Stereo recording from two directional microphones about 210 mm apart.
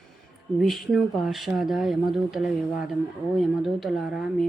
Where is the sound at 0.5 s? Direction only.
Centre (ahead or behind).